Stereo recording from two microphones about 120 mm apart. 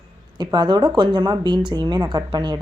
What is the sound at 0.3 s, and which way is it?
Speech, 35° right (ahead or behind).